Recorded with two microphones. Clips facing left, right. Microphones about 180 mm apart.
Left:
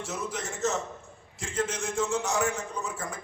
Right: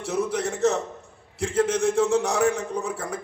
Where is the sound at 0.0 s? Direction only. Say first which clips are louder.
Right 9 dB; 60° right (ahead or behind).